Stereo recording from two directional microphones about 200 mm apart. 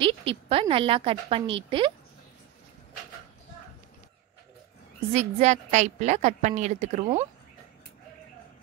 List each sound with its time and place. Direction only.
0.0 s a woman's voice: 30° right (ahead or behind)
5.1 s a woman's voice: 35° right (ahead or behind)